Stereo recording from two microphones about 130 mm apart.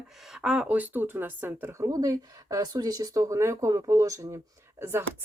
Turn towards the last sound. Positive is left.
turn(degrees=-20)  # may be behind; listen again after turning